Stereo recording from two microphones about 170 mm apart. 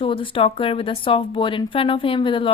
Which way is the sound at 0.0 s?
30° left (ahead or behind).